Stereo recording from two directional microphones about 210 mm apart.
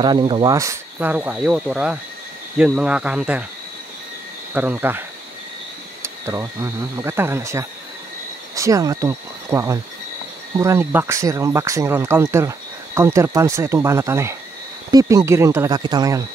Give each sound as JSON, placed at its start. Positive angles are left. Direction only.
{"t": 0.0, "sound": "speech", "side_deg": -20}
{"t": 4.6, "sound": "speech", "side_deg": -10}
{"t": 6.2, "sound": "speech", "side_deg": -15}